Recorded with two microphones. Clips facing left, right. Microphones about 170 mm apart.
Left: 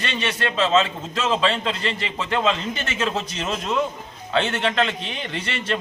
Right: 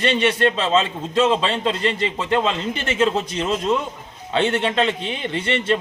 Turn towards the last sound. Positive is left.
turn(degrees=-25)  # may be behind; listen again after turning